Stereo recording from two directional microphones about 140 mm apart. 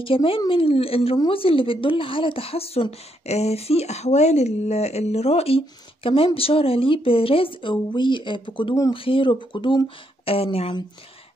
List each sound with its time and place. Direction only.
0.0 s a woman's voice: 40° left (ahead or behind)